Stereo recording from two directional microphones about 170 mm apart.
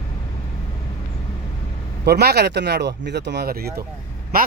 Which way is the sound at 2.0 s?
75° right (ahead or behind).